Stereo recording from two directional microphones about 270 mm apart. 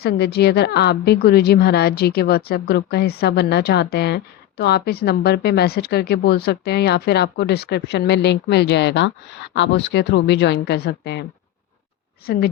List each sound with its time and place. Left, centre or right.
0.0 s a woman's voice: left